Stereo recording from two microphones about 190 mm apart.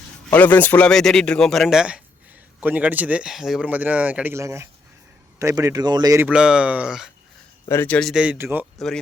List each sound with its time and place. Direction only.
0.3 s speech: 10° left (ahead or behind); by 6.2 s 20° right (ahead or behind)
6.2 s speech: 5° right (ahead or behind)
7.7 s speech: 10° left (ahead or behind); by 8.6 s 10° right (ahead or behind)